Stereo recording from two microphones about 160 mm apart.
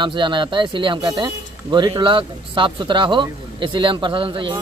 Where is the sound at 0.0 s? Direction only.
30° right (ahead or behind).